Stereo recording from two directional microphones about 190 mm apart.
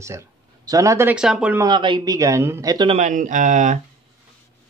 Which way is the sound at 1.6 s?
25° right (ahead or behind).